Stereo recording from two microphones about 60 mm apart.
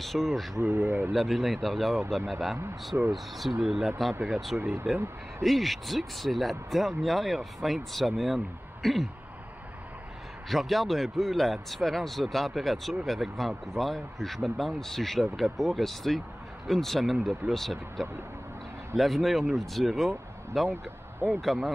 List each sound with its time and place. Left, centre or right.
0.0 s speech: centre
0.6 s speech: right
1.1 s speech: centre
4.6 s speech: right
5.4 s speech: centre
10.5 s speech: centre
20.6 s speech: right
21.3 s speech: centre